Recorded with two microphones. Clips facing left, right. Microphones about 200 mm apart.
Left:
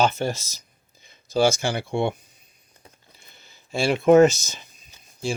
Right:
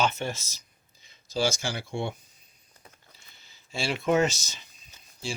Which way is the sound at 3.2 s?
55° left (ahead or behind).